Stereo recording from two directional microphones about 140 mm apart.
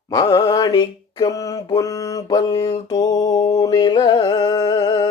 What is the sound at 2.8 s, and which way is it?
Music, 25° left (ahead or behind).